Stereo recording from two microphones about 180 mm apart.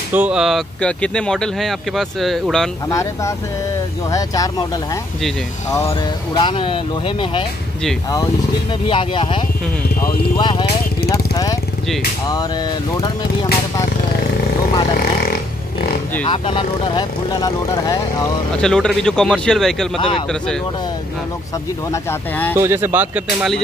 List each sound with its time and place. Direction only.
0.1 s speech: 5° right (ahead or behind)
2.9 s speech: 15° left (ahead or behind)
5.7 s speech: 15° left (ahead or behind)
8.8 s speech: 30° left (ahead or behind)
11.1 s vehicle: 20° left (ahead or behind)
13.0 s speech: 25° left (ahead or behind)
16.3 s speech: 30° left (ahead or behind)
18.6 s speech: 5° left (ahead or behind)
20.0 s speech: 30° left (ahead or behind)
21.9 s speech: 10° left (ahead or behind)
22.6 s speech: 15° right (ahead or behind)